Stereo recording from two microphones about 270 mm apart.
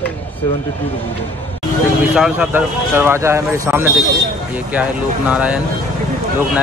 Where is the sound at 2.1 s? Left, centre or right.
Centre.